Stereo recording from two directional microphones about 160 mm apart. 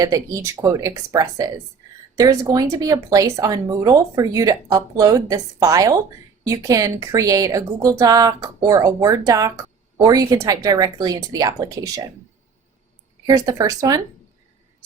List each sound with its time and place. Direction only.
0.0 s speech: 20° right (ahead or behind)
13.2 s speech: 25° right (ahead or behind)